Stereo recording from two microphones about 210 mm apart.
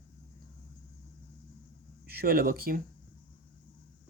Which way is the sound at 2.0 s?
45° right (ahead or behind).